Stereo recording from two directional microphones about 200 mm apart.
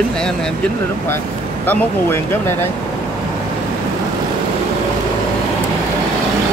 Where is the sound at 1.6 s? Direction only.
10° left (ahead or behind).